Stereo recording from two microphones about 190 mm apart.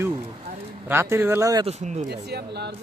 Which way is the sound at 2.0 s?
60° right (ahead or behind).